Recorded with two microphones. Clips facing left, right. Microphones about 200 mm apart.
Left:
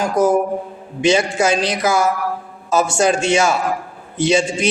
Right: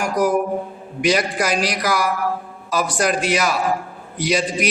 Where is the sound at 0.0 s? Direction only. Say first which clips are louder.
Left 3 dB; 25° left (ahead or behind).